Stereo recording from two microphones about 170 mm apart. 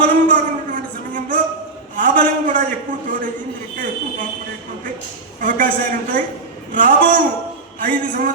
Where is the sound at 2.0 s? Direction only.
55° right (ahead or behind).